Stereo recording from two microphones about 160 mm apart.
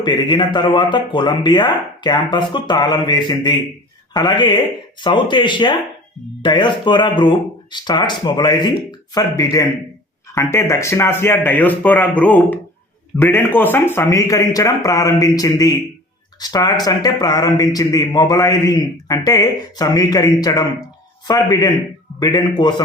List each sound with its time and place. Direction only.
0.0 s speech: 30° left (ahead or behind)